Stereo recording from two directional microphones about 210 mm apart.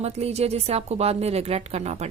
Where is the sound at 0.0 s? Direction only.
30° right (ahead or behind).